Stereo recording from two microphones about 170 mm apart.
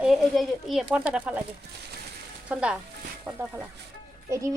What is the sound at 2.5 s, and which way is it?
Speech, 5° right (ahead or behind).